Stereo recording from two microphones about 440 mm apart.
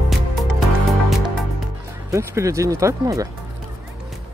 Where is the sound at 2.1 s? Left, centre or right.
Centre.